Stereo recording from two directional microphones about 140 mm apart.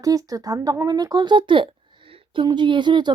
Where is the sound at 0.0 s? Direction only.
25° right (ahead or behind).